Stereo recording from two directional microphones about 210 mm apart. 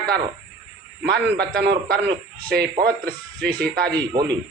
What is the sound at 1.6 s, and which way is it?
Speech, 55° right (ahead or behind).